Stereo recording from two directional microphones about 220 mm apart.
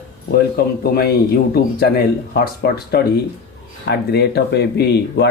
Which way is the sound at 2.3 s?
45° left (ahead or behind).